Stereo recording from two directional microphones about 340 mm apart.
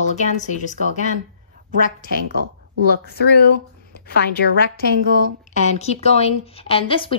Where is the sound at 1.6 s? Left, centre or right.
Right.